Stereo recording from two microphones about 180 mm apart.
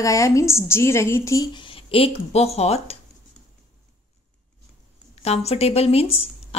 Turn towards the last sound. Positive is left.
turn(degrees=35)  # may be behind; listen again after turning